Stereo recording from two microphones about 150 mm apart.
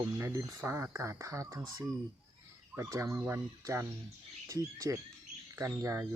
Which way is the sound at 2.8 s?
20° right (ahead or behind).